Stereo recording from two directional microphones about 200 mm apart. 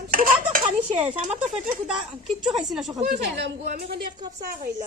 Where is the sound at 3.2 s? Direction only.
55° right (ahead or behind).